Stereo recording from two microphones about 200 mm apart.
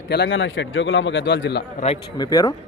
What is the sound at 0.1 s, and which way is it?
A man's voice, 65° left (ahead or behind).